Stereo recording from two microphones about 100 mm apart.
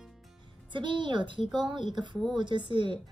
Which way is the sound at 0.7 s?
55° right (ahead or behind).